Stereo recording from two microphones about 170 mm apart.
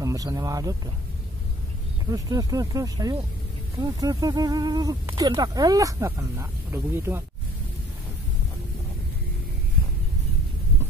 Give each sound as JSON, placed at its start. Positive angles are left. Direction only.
{"t": 0.0, "sound": "speech", "side_deg": -20}
{"t": 2.0, "sound": "speech", "side_deg": -20}